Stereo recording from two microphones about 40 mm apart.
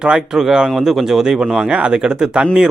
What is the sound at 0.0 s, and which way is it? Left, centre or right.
Speech, right.